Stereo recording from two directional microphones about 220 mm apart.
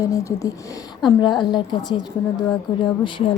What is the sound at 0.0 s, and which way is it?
A woman's voice, 15° left (ahead or behind).